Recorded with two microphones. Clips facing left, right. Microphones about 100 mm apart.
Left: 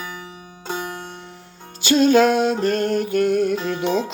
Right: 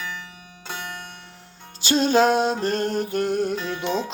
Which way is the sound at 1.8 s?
35° right (ahead or behind).